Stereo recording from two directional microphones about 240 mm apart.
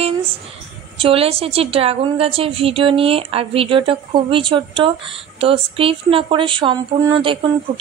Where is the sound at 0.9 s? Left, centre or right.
Right.